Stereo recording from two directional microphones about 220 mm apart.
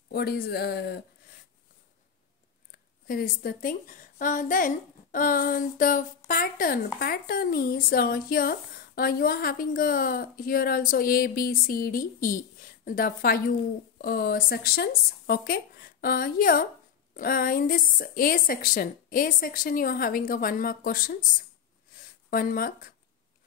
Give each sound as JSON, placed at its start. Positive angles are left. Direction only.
{"t": 0.1, "sound": "speech", "side_deg": 45}
{"t": 3.1, "sound": "a woman's voice", "side_deg": 40}